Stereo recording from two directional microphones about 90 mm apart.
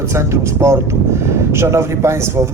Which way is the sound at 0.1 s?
30° right (ahead or behind).